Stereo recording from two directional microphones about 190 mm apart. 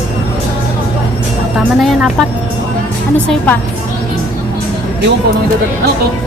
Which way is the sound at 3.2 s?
10° left (ahead or behind).